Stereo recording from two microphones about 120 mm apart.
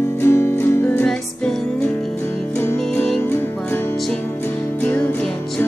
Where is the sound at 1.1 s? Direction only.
5° left (ahead or behind).